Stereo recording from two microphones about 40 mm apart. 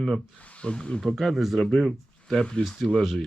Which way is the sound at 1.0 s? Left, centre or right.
Centre.